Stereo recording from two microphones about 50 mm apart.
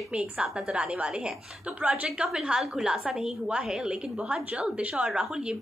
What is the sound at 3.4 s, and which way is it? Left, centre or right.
A woman's voice, right.